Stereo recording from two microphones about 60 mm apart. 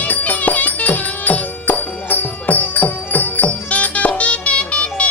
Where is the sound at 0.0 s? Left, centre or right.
Left.